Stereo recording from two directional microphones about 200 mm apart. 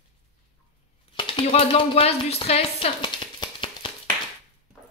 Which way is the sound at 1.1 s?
25° left (ahead or behind).